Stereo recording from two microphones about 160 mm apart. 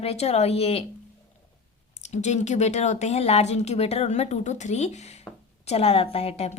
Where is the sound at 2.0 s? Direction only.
45° left (ahead or behind).